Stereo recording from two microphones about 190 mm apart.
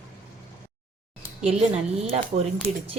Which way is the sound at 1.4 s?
30° right (ahead or behind).